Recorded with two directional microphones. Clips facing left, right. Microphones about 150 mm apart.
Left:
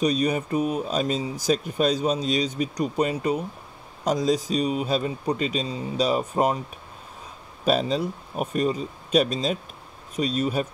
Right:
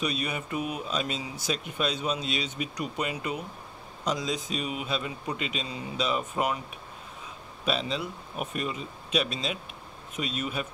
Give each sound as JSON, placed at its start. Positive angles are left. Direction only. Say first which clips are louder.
{"t": 0.0, "sound": "speech", "louder": "left 9 dB", "side_deg": 40}
{"t": 7.6, "sound": "speech", "louder": "left 7 dB", "side_deg": 40}